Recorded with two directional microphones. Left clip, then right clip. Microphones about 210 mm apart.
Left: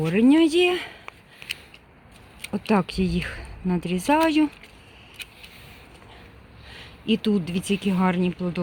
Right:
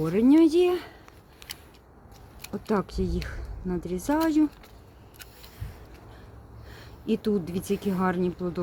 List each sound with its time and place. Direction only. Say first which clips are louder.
0.0 s speech: left 1 dB; 35° left (ahead or behind)
2.5 s speech: left 5 dB; 45° left (ahead or behind)
6.7 s speech: left 4 dB; 35° left (ahead or behind)